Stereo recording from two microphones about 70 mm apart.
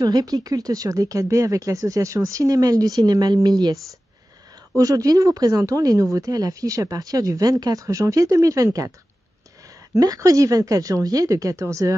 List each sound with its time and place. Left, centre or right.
0.0 s speech: right
4.7 s speech: right
9.7 s speech: right